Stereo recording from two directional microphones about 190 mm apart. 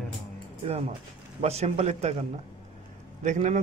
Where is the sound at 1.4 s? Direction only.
35° right (ahead or behind).